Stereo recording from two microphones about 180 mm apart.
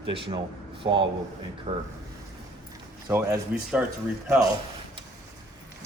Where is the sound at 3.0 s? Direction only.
15° right (ahead or behind).